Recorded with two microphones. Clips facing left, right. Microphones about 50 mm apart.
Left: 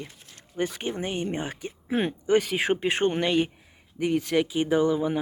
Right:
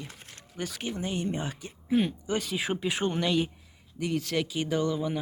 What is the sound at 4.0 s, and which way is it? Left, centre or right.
Speech, left.